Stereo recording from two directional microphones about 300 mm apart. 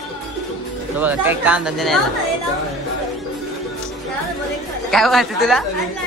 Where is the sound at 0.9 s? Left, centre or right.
Centre.